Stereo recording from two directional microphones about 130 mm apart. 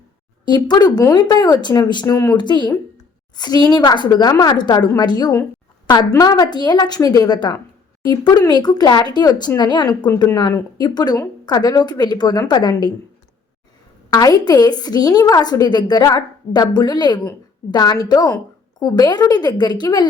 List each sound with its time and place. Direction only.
0.4 s a woman's voice: 35° left (ahead or behind)
14.1 s a woman's voice: 30° left (ahead or behind)